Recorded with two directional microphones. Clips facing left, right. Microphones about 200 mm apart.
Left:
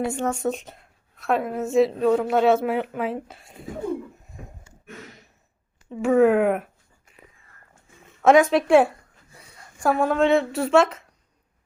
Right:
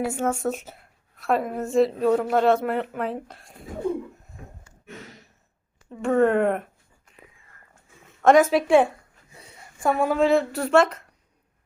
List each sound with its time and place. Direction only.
0.0 s a woman's voice: 5° right (ahead or behind)
5.9 s a woman's voice: 5° left (ahead or behind)
8.2 s a woman's voice: centre (ahead or behind)
9.4 s a sound: 25° right (ahead or behind)
9.8 s a woman's voice: centre (ahead or behind)